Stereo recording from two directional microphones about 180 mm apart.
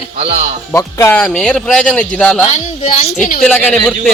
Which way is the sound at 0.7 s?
15° left (ahead or behind).